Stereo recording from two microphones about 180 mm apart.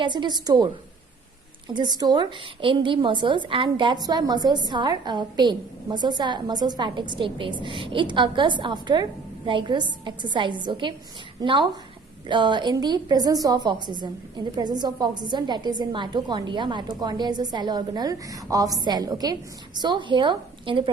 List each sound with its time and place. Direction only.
0.0 s a woman's voice: 25° right (ahead or behind)